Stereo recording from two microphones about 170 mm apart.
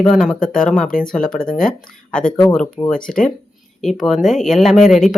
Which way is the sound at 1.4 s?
55° left (ahead or behind).